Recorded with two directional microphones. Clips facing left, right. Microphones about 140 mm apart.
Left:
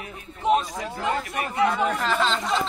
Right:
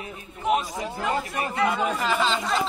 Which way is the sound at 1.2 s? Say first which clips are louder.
Even; 30° right (ahead or behind).